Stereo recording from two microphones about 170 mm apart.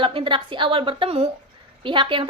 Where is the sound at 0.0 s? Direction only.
30° right (ahead or behind).